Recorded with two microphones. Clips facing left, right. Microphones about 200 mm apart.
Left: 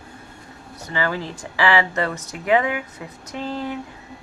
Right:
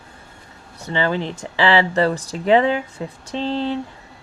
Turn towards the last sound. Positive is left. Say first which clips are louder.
# right 5 dB
turn(degrees=-30)  # may be behind; listen again after turning